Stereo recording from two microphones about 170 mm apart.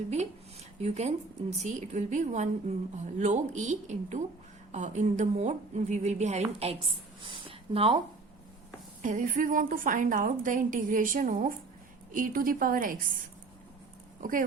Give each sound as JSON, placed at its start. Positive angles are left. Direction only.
{"t": 0.8, "sound": "a woman's voice", "side_deg": -40}
{"t": 9.0, "sound": "a woman's voice", "side_deg": -50}
{"t": 14.2, "sound": "speech", "side_deg": -55}